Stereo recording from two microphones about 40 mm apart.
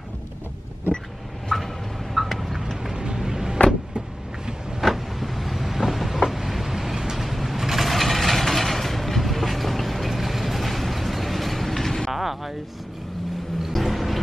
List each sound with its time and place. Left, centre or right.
1.5 s fowl: centre
2.1 s vehicle: centre
2.8 s music: centre
4.5 s vehicle: centre
4.8 s vehicle: centre
12.1 s a sound: centre
13.7 s music: centre